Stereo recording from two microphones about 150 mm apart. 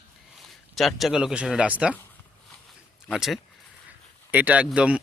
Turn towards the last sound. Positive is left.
turn(degrees=-5)  # may be behind; listen again after turning